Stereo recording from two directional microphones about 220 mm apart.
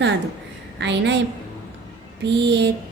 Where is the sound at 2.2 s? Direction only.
50° right (ahead or behind).